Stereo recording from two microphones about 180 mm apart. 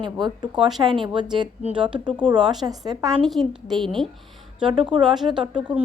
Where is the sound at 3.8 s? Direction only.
Centre (ahead or behind).